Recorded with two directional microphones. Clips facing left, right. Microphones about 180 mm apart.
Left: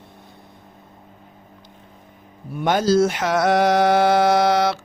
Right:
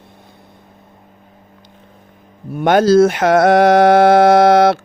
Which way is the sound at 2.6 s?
60° right (ahead or behind).